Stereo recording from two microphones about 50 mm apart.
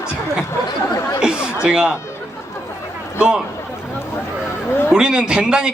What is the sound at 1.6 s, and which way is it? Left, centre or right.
Speech, centre.